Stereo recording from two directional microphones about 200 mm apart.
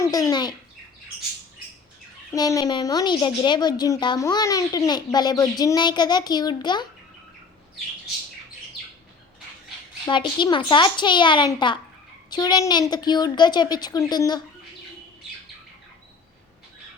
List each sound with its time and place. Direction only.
0.0 s a woman's voice: 20° left (ahead or behind)
2.3 s a woman's voice: 20° left (ahead or behind)
10.1 s a woman's voice: 25° left (ahead or behind)